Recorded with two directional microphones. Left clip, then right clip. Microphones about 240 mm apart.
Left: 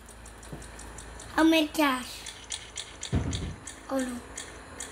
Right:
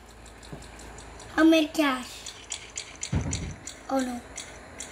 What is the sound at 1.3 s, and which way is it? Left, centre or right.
Speech, centre.